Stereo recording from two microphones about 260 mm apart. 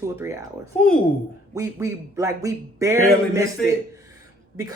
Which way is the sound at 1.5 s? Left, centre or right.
Centre.